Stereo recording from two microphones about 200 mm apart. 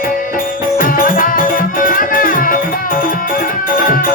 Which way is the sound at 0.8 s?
45° left (ahead or behind).